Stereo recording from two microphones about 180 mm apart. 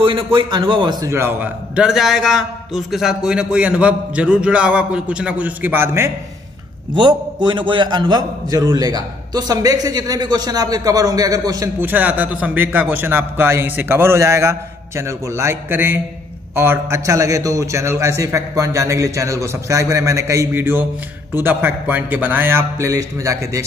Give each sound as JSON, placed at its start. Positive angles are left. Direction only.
{"t": 0.0, "sound": "a man's voice", "side_deg": -30}
{"t": 1.0, "sound": "a man's voice", "side_deg": -15}
{"t": 6.9, "sound": "a man's voice", "side_deg": -25}